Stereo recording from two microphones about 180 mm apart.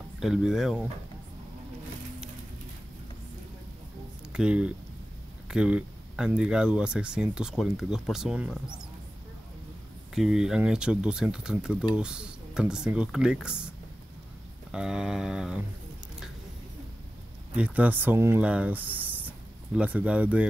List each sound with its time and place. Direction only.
0.2 s speech: 5° right (ahead or behind)
4.3 s speech: 5° right (ahead or behind)
10.1 s speech: 5° right (ahead or behind)
14.7 s speech: 5° right (ahead or behind)
17.6 s speech: 10° right (ahead or behind)